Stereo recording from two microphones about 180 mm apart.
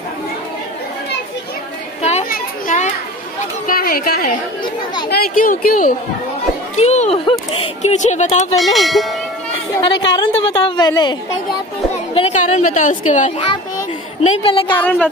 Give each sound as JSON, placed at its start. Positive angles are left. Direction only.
{"t": 2.0, "sound": "chatter", "side_deg": 35}
{"t": 2.2, "sound": "children playing", "side_deg": 50}
{"t": 3.3, "sound": "a woman's voice", "side_deg": 50}
{"t": 6.8, "sound": "chop", "side_deg": 35}
{"t": 7.8, "sound": "speech", "side_deg": 40}
{"t": 8.5, "sound": "speech", "side_deg": 0}
{"t": 10.1, "sound": "a woman's voice", "side_deg": 30}
{"t": 12.1, "sound": "chatter", "side_deg": 30}
{"t": 12.4, "sound": "a woman's voice", "side_deg": 40}
{"t": 14.4, "sound": "speech", "side_deg": 30}
{"t": 14.7, "sound": "a woman's voice", "side_deg": 10}